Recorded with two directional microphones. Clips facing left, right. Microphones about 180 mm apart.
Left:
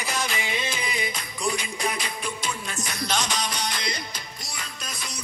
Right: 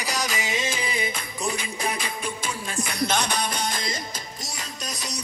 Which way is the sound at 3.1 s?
55° right (ahead or behind).